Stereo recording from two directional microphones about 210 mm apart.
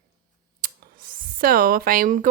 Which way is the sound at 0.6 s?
40° right (ahead or behind).